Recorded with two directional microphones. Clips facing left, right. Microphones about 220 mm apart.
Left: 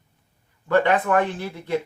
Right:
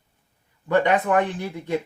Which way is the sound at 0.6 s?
15° right (ahead or behind).